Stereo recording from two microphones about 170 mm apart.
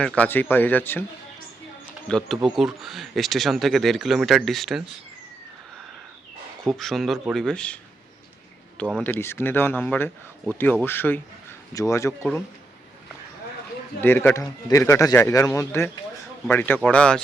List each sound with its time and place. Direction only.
0.0 s speech: 5° left (ahead or behind)
2.0 s speech: centre (ahead or behind)
6.7 s speech: centre (ahead or behind)
9.0 s speech: 10° left (ahead or behind)
14.0 s speech: 15° left (ahead or behind)